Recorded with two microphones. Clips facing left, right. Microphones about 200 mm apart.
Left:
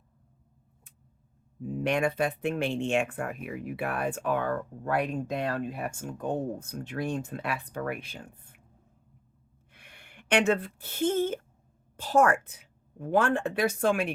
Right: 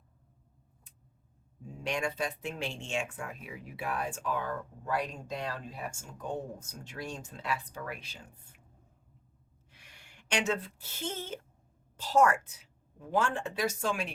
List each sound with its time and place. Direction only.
1.6 s speech: 55° left (ahead or behind)
9.7 s speech: 55° left (ahead or behind)